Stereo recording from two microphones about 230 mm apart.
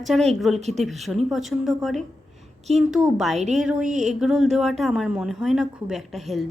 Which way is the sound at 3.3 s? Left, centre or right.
Right.